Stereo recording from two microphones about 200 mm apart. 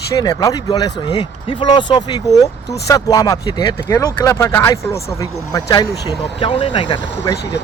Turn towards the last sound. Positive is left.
turn(degrees=25)  # may be behind; listen again after turning